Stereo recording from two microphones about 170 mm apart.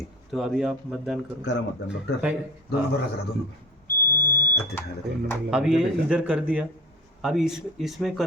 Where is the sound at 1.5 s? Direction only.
90° left.